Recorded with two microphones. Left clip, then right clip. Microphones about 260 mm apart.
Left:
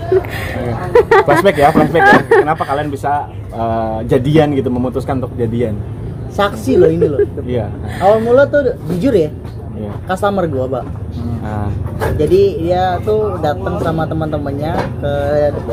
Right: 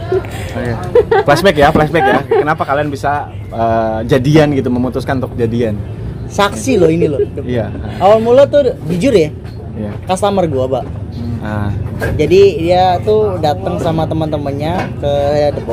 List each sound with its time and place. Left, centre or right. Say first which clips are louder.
1.5 s speech: right 1 dB; right
6.3 s speech: even; centre
8.0 s speech: right 2 dB; centre
11.4 s a sound: right 3 dB; right
12.1 s speech: right 3 dB; centre